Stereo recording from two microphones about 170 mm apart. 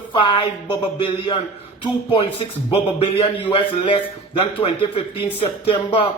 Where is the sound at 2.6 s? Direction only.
30° left (ahead or behind).